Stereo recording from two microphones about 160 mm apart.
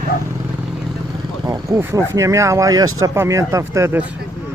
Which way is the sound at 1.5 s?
20° right (ahead or behind).